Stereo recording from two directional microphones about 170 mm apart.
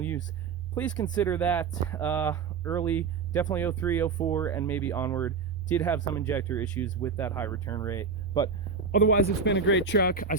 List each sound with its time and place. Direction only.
1.1 s speech: 10° left (ahead or behind)
9.0 s speech: 90° left; by 10.3 s 60° left (ahead or behind)